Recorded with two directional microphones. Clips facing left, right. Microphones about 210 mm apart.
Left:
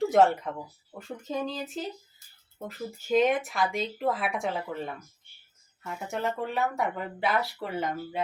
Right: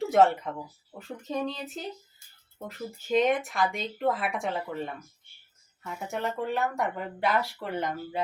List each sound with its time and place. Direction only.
0.0 s speech: centre (ahead or behind)
5.8 s speech: centre (ahead or behind)